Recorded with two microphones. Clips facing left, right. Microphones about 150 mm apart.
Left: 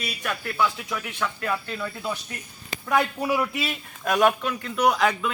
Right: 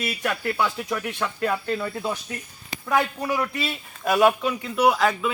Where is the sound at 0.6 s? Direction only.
40° right (ahead or behind).